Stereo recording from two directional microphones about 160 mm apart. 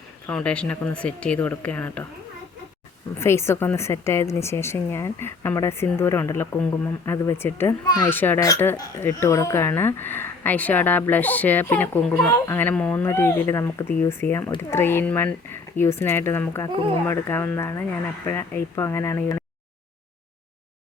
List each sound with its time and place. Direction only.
0.3 s speech: 5° left (ahead or behind)
3.2 s a child's voice: 15° left (ahead or behind)
8.1 s speech: 10° left (ahead or behind)